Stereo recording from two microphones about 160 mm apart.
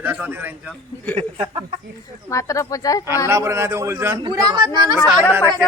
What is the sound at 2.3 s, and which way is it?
Speech, 20° left (ahead or behind).